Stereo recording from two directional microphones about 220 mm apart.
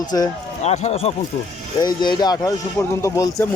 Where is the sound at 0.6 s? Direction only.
30° left (ahead or behind).